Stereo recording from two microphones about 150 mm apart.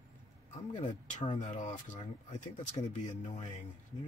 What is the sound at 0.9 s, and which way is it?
Speech, 55° left (ahead or behind).